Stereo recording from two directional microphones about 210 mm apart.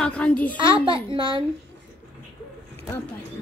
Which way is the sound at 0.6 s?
25° right (ahead or behind).